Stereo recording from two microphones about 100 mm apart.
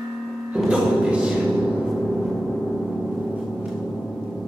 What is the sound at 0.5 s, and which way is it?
Music, 10° right (ahead or behind).